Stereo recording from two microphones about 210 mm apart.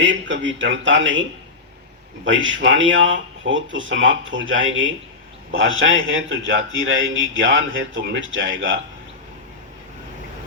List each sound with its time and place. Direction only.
0.3 s speech: 60° right (ahead or behind)
2.2 s a man's voice: 65° right (ahead or behind)